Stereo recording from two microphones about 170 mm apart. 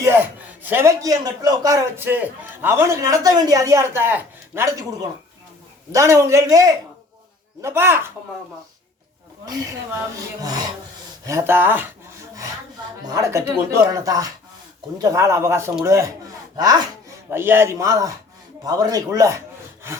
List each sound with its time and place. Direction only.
0.0 s a man's voice: 15° right (ahead or behind)
10.4 s a man's voice: 25° right (ahead or behind)
13.1 s a man's voice: 20° right (ahead or behind)